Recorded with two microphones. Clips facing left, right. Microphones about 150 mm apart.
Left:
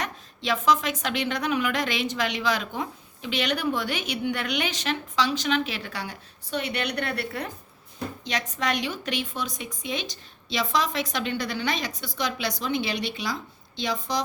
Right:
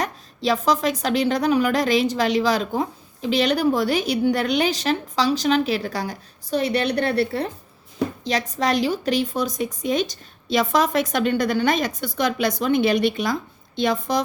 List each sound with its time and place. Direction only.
0.0 s a woman's voice: 35° right (ahead or behind); by 14.2 s 55° right (ahead or behind)